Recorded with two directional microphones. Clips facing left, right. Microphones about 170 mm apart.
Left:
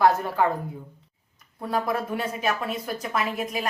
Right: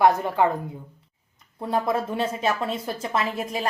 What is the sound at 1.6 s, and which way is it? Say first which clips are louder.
A woman's voice: right 2 dB; 25° right (ahead or behind).